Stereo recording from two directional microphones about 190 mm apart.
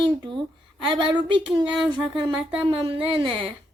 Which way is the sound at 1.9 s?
25° right (ahead or behind).